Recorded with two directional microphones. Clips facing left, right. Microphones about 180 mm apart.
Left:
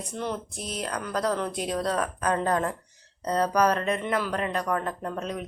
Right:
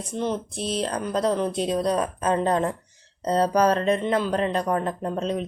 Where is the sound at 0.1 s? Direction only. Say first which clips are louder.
Right 6 dB; 25° right (ahead or behind).